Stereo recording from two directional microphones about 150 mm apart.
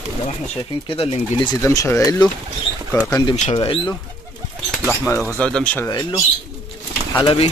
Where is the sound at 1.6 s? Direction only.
20° left (ahead or behind).